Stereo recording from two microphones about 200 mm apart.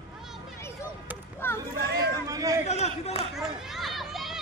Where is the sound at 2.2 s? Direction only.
15° right (ahead or behind).